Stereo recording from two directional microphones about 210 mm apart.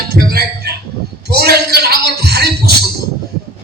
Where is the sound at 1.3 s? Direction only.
50° right (ahead or behind).